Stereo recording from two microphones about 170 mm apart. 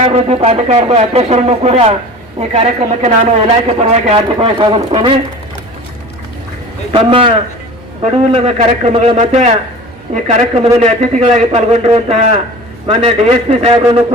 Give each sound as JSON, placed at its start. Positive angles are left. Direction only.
{"t": 0.0, "sound": "a man's voice", "side_deg": -40}
{"t": 6.9, "sound": "a man's voice", "side_deg": -30}